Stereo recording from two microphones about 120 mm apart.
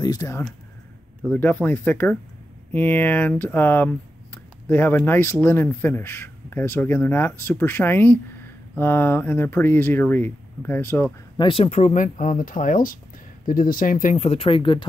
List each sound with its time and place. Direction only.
0.0 s speech: 30° left (ahead or behind)
1.3 s speech: 15° left (ahead or behind)
11.3 s speech: 45° left (ahead or behind); by 12.7 s 90° left
14.0 s speech: 65° left (ahead or behind); by 14.9 s 45° left (ahead or behind)